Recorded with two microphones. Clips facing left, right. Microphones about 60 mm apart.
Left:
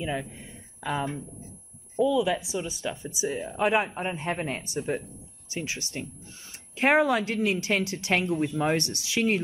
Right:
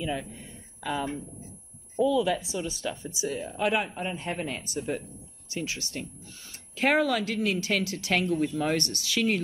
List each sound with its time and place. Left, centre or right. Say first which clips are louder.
0.0 s speech: left 1 dB; centre
2.0 s speech: even; centre